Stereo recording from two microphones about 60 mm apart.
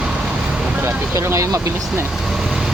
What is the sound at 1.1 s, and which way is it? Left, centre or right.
Speech, right.